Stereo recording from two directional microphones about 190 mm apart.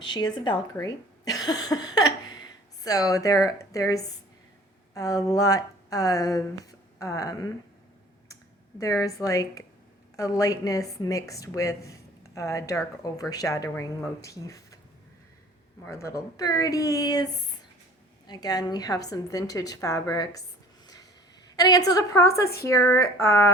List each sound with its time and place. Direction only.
0.1 s speech: 20° left (ahead or behind)
8.8 s a woman's voice: 15° left (ahead or behind)
15.8 s a woman's voice: 15° left (ahead or behind)
20.8 s a sound: 20° left (ahead or behind)
21.5 s a woman's voice: 20° left (ahead or behind)